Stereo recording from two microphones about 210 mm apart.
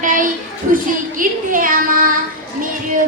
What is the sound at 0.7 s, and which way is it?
A woman's voice, 40° right (ahead or behind).